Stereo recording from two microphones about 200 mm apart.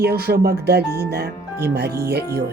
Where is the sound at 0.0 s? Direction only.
50° right (ahead or behind).